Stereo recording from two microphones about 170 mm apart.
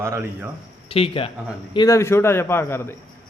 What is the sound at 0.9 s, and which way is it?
Speech, 35° left (ahead or behind).